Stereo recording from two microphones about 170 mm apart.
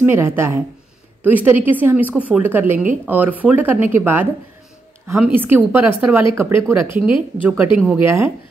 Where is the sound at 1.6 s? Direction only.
10° right (ahead or behind).